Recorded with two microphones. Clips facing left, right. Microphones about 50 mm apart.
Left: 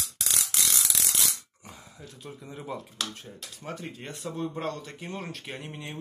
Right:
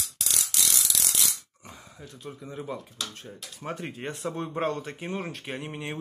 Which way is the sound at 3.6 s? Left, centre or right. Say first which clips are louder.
Right 4 dB; right.